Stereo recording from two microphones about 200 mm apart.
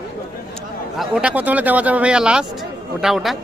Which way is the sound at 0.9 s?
5° right (ahead or behind).